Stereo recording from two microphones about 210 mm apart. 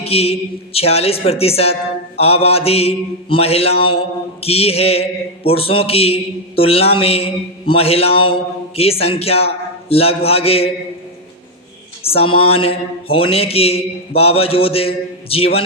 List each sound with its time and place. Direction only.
0.0 s a man's voice: 30° left (ahead or behind)
12.0 s a man's voice: 25° left (ahead or behind)